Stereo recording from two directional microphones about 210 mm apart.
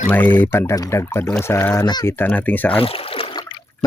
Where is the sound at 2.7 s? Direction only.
25° left (ahead or behind).